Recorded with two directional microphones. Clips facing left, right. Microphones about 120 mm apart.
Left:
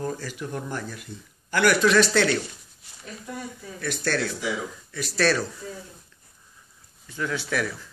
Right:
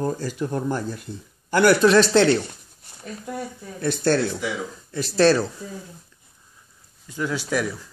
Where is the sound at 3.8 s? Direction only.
30° right (ahead or behind).